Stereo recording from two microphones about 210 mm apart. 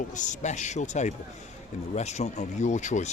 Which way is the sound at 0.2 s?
35° left (ahead or behind).